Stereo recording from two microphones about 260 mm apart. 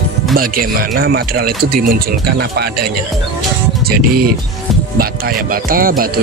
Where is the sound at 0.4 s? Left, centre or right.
Right.